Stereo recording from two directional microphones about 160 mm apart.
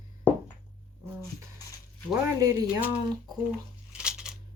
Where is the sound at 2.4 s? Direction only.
20° right (ahead or behind).